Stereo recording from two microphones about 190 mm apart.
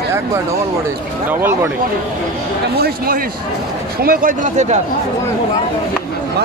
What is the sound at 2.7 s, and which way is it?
Speech, 50° right (ahead or behind).